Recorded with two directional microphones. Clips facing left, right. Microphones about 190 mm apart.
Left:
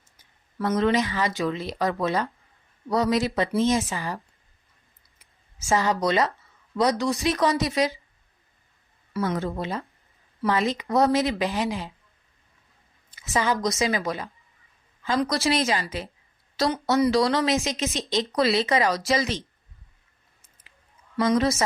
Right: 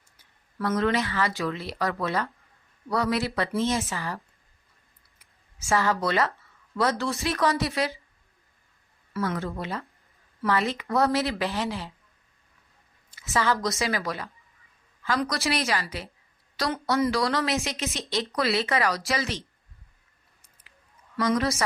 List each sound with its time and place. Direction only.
0.2 s speech: 20° left (ahead or behind)
5.6 s speech: 20° left (ahead or behind)
9.1 s a woman's voice: 20° left (ahead or behind)
13.1 s a woman's voice: 20° left (ahead or behind)
21.2 s a woman's voice: 20° left (ahead or behind)